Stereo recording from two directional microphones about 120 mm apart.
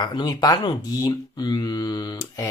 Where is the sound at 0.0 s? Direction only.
40° left (ahead or behind).